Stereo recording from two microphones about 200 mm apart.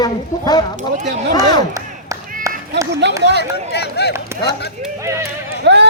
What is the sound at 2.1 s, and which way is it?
Clapping, 15° right (ahead or behind).